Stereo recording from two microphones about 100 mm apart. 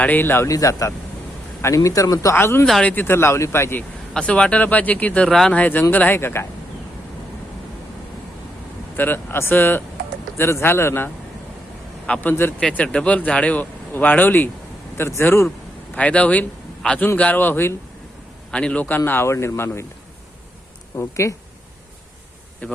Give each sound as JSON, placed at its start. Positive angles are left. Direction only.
{"t": 0.0, "sound": "speech", "side_deg": 20}
{"t": 0.4, "sound": "a man's voice", "side_deg": 30}
{"t": 4.1, "sound": "speech", "side_deg": 10}
{"t": 9.0, "sound": "speech", "side_deg": 20}
{"t": 12.0, "sound": "speech", "side_deg": 10}
{"t": 12.3, "sound": "speech", "side_deg": 20}
{"t": 12.5, "sound": "speech", "side_deg": 10}
{"t": 20.9, "sound": "a man's voice", "side_deg": 30}
{"t": 22.6, "sound": "a man's voice", "side_deg": 15}